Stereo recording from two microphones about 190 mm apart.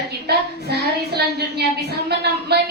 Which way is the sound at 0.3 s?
60° right (ahead or behind).